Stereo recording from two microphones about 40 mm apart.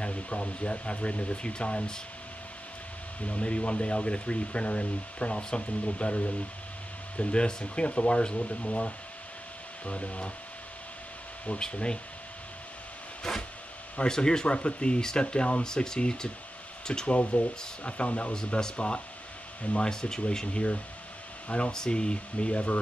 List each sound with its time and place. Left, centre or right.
0.0 s speech: left
3.3 s speech: left
11.6 s speech: left
13.2 s speech: centre
17.1 s speech: left
18.3 s speech: centre
19.8 s speech: centre
20.5 s speech: left
21.7 s speech: centre